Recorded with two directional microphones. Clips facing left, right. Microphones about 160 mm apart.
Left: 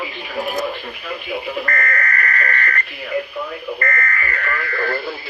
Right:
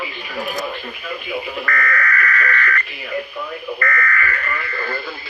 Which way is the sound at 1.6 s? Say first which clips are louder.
Right 1 dB; 35° left (ahead or behind).